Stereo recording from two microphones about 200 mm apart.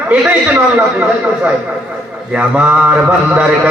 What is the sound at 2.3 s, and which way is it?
A man's voice, 5° right (ahead or behind).